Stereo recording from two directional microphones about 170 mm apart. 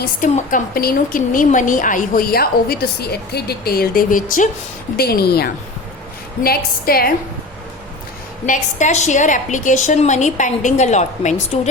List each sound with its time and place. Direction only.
0.0 s a woman's voice: 55° left (ahead or behind)
4.9 s a woman's voice: 65° left (ahead or behind)
8.4 s a woman's voice: 45° left (ahead or behind)